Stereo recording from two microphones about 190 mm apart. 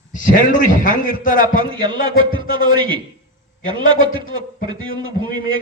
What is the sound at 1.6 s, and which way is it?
A man's voice, 25° right (ahead or behind).